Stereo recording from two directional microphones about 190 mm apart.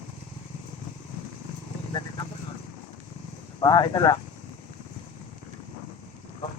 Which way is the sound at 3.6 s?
20° left (ahead or behind).